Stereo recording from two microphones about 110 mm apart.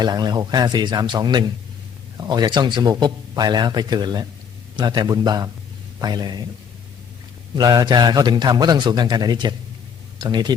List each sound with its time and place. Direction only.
0.0 s speech: 40° right (ahead or behind)
7.5 s speech: 35° right (ahead or behind)